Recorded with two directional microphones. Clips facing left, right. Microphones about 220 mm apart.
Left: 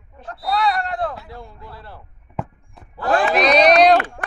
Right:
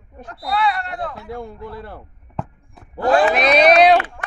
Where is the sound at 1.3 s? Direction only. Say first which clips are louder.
Right 8 dB; 50° right (ahead or behind).